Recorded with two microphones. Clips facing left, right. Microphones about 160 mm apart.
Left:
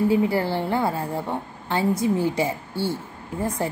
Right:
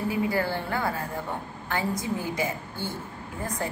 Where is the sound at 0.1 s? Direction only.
25° left (ahead or behind).